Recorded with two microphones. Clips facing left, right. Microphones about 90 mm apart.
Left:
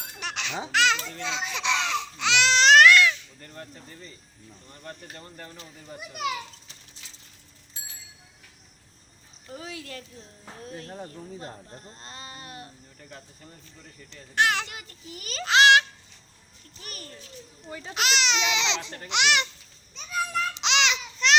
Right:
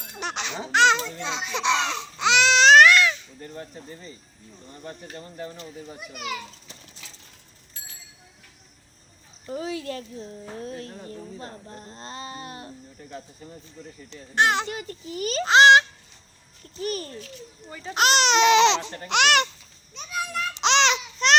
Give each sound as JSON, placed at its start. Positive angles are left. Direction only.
{"t": 0.1, "sound": "laughter", "side_deg": -25}
{"t": 0.7, "sound": "a child's voice", "side_deg": -25}
{"t": 3.4, "sound": "speech", "side_deg": -10}
{"t": 6.0, "sound": "a child's voice", "side_deg": 0}
{"t": 9.5, "sound": "speech", "side_deg": -30}
{"t": 11.9, "sound": "a child's voice", "side_deg": -30}
{"t": 14.1, "sound": "a child's voice", "side_deg": -25}
{"t": 16.8, "sound": "speech", "side_deg": -40}
{"t": 17.2, "sound": "speech", "side_deg": -75}
{"t": 17.7, "sound": "a child's voice", "side_deg": 5}
{"t": 17.9, "sound": "speech", "side_deg": -45}
{"t": 20.0, "sound": "children playing", "side_deg": -5}
{"t": 20.6, "sound": "babbling", "side_deg": -35}